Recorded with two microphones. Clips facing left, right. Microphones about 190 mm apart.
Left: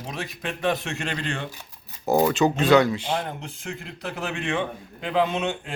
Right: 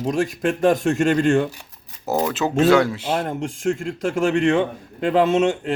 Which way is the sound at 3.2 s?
50° right (ahead or behind).